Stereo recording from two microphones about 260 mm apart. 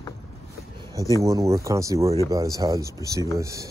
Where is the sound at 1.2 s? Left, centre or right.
Centre.